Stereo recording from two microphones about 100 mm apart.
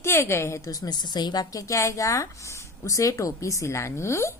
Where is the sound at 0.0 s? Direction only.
25° left (ahead or behind).